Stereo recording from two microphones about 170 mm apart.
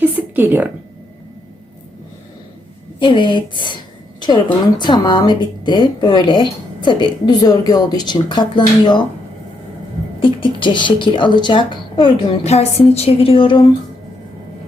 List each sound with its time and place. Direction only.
0.0 s a sound: 10° right (ahead or behind)
3.0 s a woman's voice: 30° left (ahead or behind)
4.8 s a woman's voice: 25° left (ahead or behind)
10.2 s a woman's voice: 30° left (ahead or behind)